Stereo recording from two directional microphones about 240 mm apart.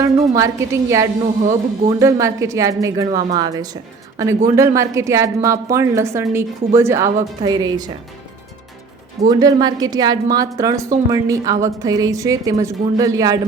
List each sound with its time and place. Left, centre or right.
0.0 s a woman's voice: centre
9.3 s a woman's voice: centre